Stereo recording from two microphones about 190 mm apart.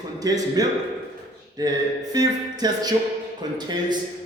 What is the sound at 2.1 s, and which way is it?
Speech, 20° right (ahead or behind).